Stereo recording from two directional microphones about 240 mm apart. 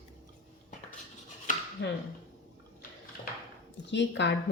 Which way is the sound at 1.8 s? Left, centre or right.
Left.